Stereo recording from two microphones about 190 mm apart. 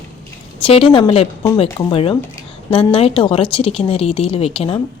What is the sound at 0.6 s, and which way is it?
A woman's voice, 30° left (ahead or behind).